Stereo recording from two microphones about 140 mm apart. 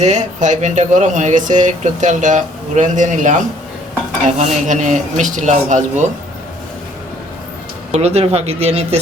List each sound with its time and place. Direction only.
0.0 s speech: 55° right (ahead or behind)
7.9 s speech: 50° right (ahead or behind)